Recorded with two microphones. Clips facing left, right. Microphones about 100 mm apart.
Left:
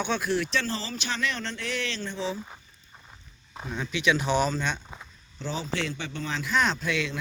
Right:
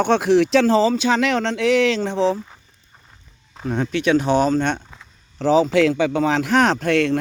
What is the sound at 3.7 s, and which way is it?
Speech, 55° right (ahead or behind).